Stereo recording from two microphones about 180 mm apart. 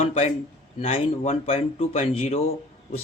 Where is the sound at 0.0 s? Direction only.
35° left (ahead or behind).